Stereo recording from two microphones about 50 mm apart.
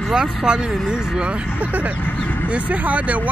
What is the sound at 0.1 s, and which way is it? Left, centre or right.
Speech, centre.